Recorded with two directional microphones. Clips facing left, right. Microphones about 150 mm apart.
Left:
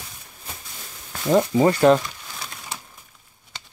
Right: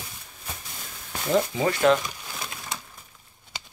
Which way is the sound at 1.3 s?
40° left (ahead or behind).